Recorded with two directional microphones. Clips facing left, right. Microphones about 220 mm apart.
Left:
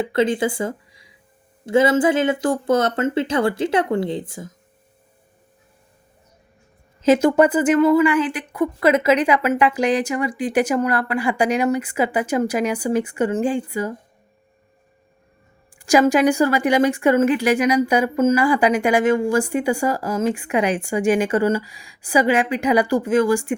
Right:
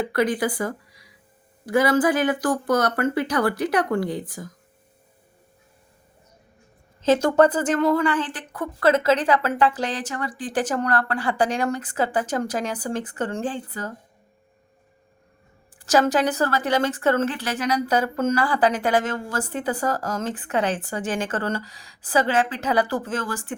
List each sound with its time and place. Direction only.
0.0 s speech: 25° left (ahead or behind)
7.0 s a woman's voice: 10° left (ahead or behind)
15.8 s a woman's voice: 10° left (ahead or behind)